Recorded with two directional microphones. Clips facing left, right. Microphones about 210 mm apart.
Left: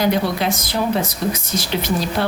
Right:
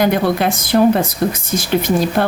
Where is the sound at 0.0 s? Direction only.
55° right (ahead or behind).